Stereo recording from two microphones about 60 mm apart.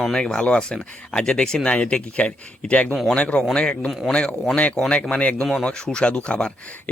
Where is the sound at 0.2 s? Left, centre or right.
Centre.